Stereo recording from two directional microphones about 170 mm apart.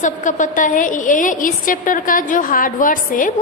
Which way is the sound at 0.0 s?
50° left (ahead or behind).